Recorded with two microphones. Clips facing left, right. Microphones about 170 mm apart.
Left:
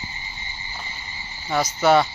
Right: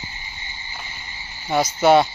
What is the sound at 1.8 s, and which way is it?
Speech, 20° right (ahead or behind).